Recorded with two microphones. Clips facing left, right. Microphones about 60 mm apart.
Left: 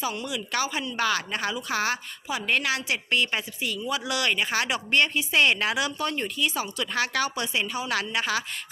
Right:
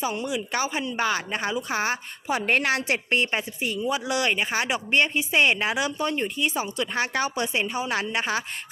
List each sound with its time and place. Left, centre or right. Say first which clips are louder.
0.0 s a woman's voice: right 3 dB; right
2.2 s a woman's voice: right 3 dB; right